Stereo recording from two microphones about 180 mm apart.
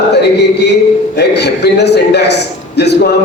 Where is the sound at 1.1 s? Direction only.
65° left (ahead or behind).